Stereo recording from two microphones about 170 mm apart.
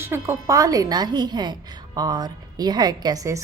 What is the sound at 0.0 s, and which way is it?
A woman's voice, 15° right (ahead or behind).